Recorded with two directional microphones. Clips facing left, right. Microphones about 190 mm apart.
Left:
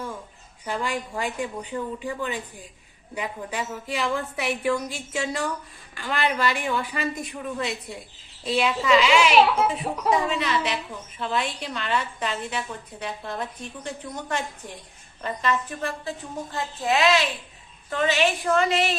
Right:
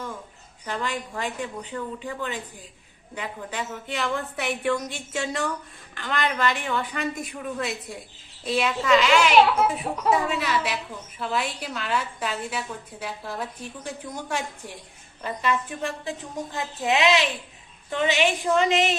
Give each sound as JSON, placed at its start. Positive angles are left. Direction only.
{"t": 0.6, "sound": "a woman's voice", "side_deg": 10}